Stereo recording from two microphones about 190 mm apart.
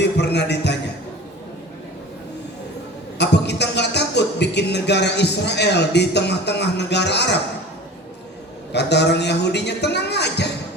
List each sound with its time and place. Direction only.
0.0 s a sound: 60° left (ahead or behind)
3.2 s speech: 65° left (ahead or behind)
8.7 s a man's voice: 65° left (ahead or behind)